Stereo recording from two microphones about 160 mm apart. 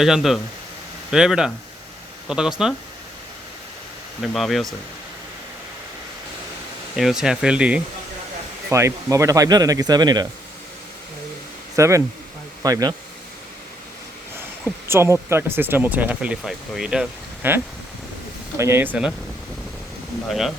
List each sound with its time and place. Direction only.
0.0 s speech: centre (ahead or behind)
4.2 s speech: centre (ahead or behind)
6.9 s speech: centre (ahead or behind)
8.7 s speech: 20° right (ahead or behind)
11.8 s speech: 20° right (ahead or behind)
14.8 s speech: 15° right (ahead or behind)
20.2 s speech: centre (ahead or behind)